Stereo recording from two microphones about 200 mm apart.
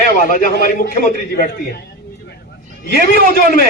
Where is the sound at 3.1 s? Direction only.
50° right (ahead or behind).